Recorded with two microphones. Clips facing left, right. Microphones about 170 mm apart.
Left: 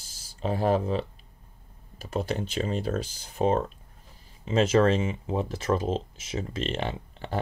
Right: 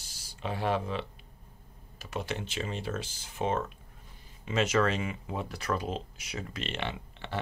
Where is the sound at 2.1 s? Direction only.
35° left (ahead or behind).